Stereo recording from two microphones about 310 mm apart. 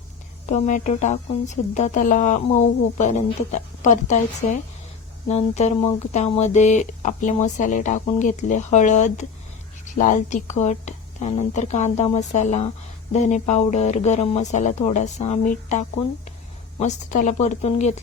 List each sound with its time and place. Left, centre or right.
0.4 s speech: left
16.8 s speech: left